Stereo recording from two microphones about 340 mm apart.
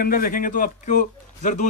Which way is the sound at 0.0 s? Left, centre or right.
Left.